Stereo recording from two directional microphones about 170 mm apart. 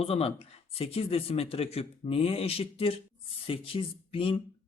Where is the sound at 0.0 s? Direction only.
35° left (ahead or behind).